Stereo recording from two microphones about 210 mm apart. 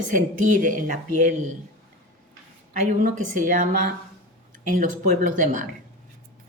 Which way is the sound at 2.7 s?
40° right (ahead or behind).